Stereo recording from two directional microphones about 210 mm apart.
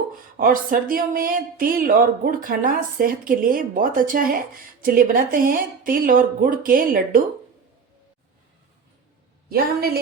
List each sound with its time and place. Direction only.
0.3 s speech: 40° right (ahead or behind)
9.5 s speech: 50° right (ahead or behind)